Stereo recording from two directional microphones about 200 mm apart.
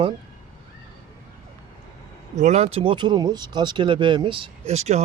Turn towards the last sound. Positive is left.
turn(degrees=-35)  # may be behind; listen again after turning